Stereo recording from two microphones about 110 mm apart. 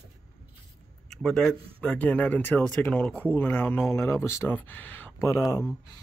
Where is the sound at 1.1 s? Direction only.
5° left (ahead or behind).